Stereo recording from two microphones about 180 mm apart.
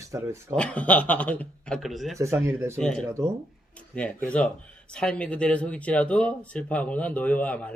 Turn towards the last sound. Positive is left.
turn(degrees=5)  # may be behind; listen again after turning